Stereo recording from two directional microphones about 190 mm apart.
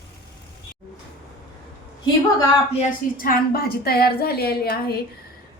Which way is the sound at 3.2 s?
50° left (ahead or behind).